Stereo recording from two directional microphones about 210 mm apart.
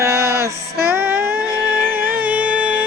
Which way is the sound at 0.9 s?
10° right (ahead or behind).